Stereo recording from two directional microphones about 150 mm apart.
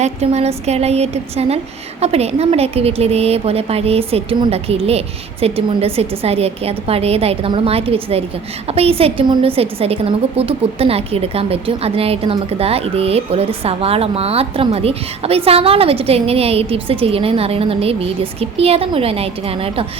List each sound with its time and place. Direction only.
0.0 s a woman's voice: 45° right (ahead or behind)